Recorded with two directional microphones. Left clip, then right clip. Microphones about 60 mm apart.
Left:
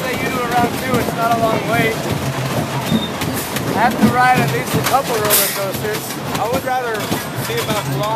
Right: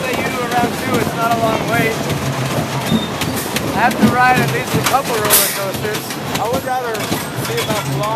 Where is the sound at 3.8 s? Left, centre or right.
Left.